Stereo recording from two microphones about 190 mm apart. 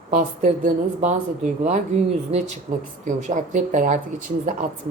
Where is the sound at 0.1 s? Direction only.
45° right (ahead or behind).